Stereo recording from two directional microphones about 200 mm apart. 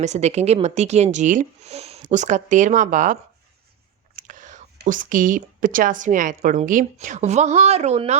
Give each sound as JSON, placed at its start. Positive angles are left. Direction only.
{"t": 0.0, "sound": "a woman's voice", "side_deg": -35}
{"t": 4.1, "sound": "whispering", "side_deg": -40}
{"t": 4.8, "sound": "a woman's voice", "side_deg": -40}